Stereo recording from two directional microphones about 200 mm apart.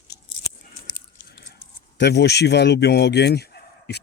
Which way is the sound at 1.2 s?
55° left (ahead or behind).